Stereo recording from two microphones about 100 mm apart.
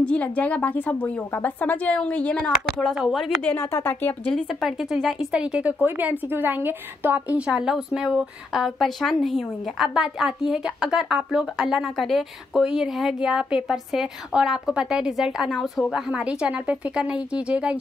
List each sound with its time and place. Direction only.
0.0 s speech: 10° left (ahead or behind)
2.9 s a woman's voice: 5° right (ahead or behind)
3.4 s a woman's voice: 25° left (ahead or behind)
4.6 s a woman's voice: centre (ahead or behind)
5.3 s speech: 10° right (ahead or behind)
7.3 s a woman's voice: 10° right (ahead or behind)